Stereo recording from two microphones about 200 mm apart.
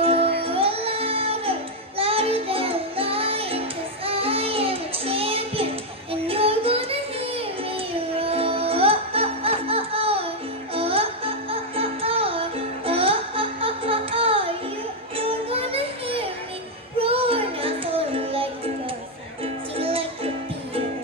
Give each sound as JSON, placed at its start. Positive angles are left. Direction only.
{"t": 0.0, "sound": "music", "side_deg": -30}
{"t": 0.4, "sound": "child singing", "side_deg": -30}
{"t": 6.2, "sound": "music", "side_deg": -30}